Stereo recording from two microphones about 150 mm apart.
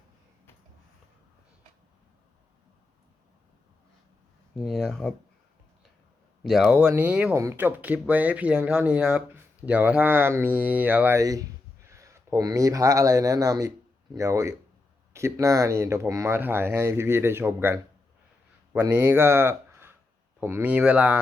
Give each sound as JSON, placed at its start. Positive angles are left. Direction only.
{"t": 4.5, "sound": "speech", "side_deg": 0}
{"t": 6.5, "sound": "a man's voice", "side_deg": -5}